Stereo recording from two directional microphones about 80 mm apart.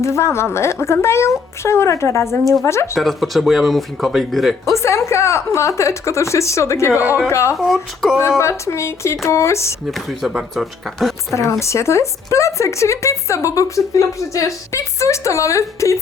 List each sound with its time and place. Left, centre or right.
0.0 s speech: left
2.9 s speech: centre
4.6 s speech: left
7.5 s speech: centre
8.4 s speech: left
10.1 s speech: centre
11.6 s speech: left